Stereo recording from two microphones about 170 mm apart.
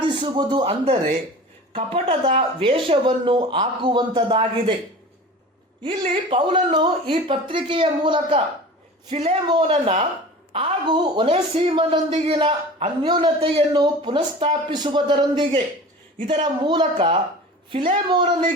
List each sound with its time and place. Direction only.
0.1 s speech: 25° right (ahead or behind)
6.3 s speech: 30° right (ahead or behind)